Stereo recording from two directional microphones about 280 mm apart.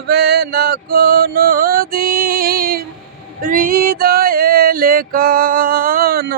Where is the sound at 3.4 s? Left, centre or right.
Right.